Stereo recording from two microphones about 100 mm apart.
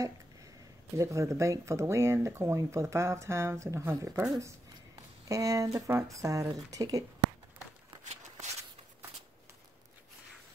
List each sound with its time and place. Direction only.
0.9 s speech: 30° right (ahead or behind)